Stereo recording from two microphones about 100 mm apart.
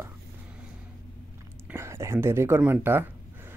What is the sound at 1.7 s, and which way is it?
Speech, 25° right (ahead or behind).